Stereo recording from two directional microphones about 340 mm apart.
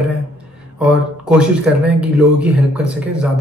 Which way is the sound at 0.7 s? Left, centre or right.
Centre.